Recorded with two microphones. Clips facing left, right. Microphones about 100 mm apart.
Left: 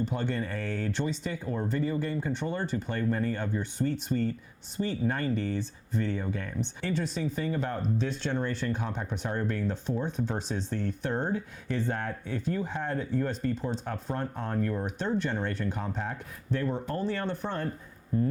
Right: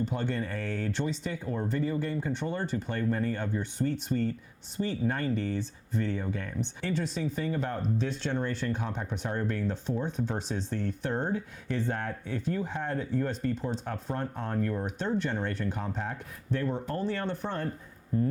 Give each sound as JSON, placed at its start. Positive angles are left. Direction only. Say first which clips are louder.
{"t": 0.2, "sound": "speech", "louder": "even", "side_deg": 25}